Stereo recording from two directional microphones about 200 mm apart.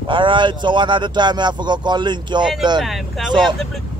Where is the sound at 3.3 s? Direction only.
20° right (ahead or behind).